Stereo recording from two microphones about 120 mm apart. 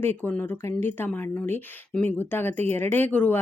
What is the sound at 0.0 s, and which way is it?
Speech, 15° left (ahead or behind).